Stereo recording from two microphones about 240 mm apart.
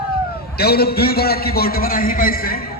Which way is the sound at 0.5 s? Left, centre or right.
Left.